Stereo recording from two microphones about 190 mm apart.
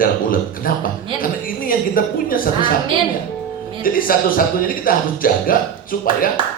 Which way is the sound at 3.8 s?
50° left (ahead or behind).